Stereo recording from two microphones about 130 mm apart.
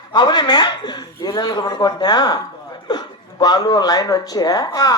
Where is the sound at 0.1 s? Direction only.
35° left (ahead or behind).